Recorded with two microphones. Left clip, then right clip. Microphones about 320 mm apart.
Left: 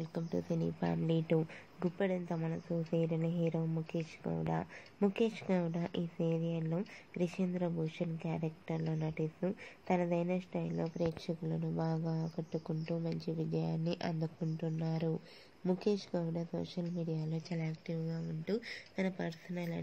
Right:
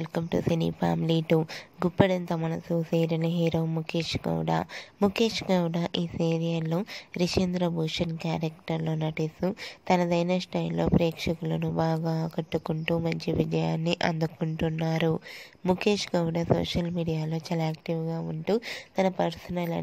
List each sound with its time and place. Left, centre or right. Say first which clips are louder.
0.0 s speech: right 11 dB; right